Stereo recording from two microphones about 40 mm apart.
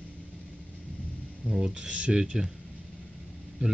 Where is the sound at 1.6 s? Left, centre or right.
Right.